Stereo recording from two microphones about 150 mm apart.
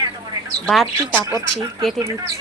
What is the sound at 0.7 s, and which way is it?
Speech, 5° left (ahead or behind).